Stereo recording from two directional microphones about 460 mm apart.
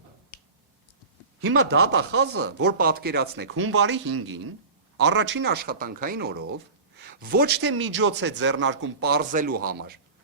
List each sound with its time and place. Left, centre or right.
1.4 s a man's voice: right